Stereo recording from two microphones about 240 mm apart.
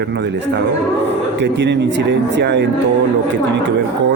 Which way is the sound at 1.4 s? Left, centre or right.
Right.